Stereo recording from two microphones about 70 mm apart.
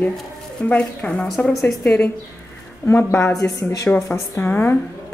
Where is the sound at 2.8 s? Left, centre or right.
Left.